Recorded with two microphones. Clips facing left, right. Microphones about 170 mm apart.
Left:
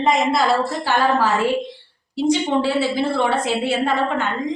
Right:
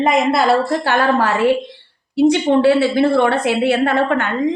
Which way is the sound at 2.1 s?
60° right (ahead or behind).